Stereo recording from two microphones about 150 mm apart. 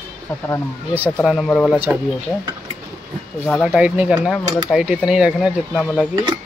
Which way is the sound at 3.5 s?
Centre (ahead or behind).